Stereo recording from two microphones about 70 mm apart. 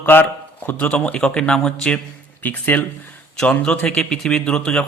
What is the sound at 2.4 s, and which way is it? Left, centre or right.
Speech, left.